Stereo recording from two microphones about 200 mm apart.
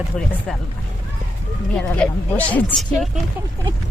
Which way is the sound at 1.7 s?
5° left (ahead or behind).